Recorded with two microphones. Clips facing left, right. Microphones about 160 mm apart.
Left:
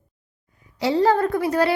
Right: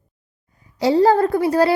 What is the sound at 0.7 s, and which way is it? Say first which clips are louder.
A woman's voice: right 4 dB; 40° right (ahead or behind).